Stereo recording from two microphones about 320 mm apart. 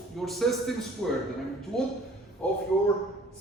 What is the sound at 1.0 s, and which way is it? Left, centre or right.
Speech, centre.